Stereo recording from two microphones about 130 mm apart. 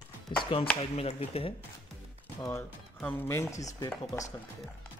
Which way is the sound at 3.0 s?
15° left (ahead or behind).